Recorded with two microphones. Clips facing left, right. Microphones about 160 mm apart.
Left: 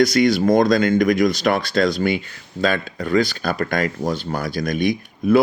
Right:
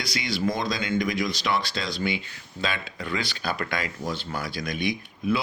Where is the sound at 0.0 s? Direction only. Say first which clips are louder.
Left 12 dB; 45° left (ahead or behind).